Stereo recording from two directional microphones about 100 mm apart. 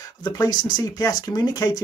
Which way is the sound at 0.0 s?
40° left (ahead or behind).